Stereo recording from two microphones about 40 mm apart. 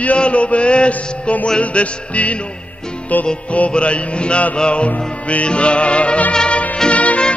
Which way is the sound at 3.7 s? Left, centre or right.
Left.